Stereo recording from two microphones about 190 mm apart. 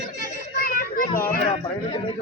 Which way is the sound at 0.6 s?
50° left (ahead or behind).